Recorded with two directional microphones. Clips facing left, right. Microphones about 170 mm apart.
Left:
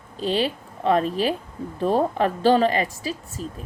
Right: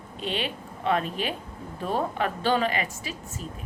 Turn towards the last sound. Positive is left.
turn(degrees=35)  # may be behind; listen again after turning